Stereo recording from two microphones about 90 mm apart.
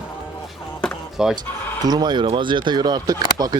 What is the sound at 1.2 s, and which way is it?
Speech, 5° right (ahead or behind).